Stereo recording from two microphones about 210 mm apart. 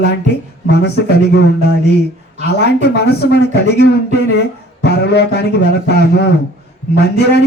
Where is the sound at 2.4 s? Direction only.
50° left (ahead or behind).